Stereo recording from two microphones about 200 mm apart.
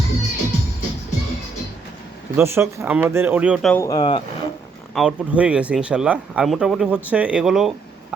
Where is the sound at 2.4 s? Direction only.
10° right (ahead or behind).